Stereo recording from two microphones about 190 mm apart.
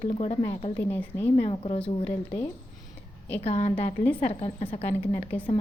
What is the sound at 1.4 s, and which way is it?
Speech, 30° left (ahead or behind).